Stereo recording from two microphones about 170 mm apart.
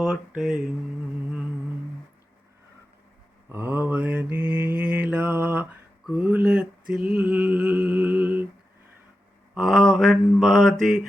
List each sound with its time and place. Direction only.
0.0 s speech: centre (ahead or behind)
3.5 s mantra: 10° right (ahead or behind)
6.1 s a sound: 5° right (ahead or behind)
9.6 s mantra: centre (ahead or behind)